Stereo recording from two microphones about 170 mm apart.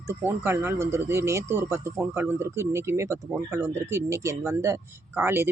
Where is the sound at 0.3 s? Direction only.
15° right (ahead or behind).